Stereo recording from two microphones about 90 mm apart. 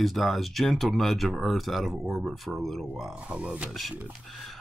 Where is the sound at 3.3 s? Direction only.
15° right (ahead or behind).